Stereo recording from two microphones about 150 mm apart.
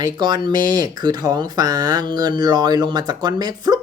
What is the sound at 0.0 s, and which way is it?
Speech, 30° right (ahead or behind).